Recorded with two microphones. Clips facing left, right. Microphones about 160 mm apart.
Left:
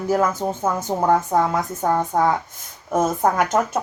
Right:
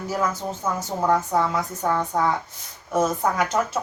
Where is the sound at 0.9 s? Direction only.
35° left (ahead or behind).